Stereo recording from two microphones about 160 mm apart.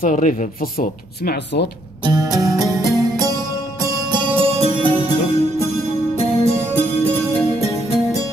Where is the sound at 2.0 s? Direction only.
25° right (ahead or behind); by 5.1 s 40° right (ahead or behind).